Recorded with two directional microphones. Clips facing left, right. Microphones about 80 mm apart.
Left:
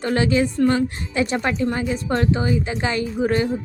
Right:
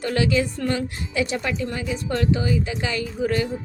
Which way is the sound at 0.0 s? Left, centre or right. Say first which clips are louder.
Left 2 dB; left.